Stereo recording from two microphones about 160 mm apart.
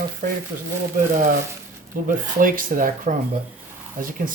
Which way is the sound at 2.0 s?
60° right (ahead or behind).